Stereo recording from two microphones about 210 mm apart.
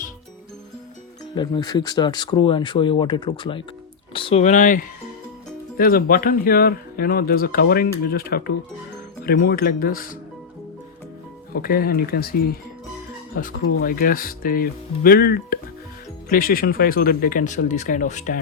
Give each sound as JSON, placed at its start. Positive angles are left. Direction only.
{"t": 1.4, "sound": "speech", "side_deg": 20}
{"t": 11.5, "sound": "speech", "side_deg": 45}